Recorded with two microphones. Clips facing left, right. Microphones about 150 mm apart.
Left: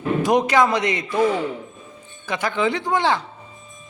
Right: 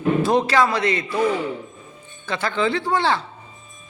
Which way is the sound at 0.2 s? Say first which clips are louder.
Left 3 dB; 15° left (ahead or behind).